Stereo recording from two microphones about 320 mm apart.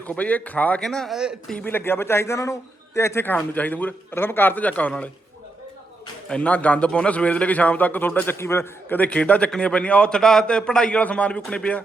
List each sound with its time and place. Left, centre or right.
0.0 s a man's voice: centre
6.2 s a man's voice: centre